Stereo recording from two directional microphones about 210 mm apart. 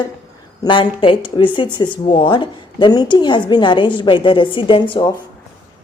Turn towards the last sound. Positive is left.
turn(degrees=25)  # may be behind; listen again after turning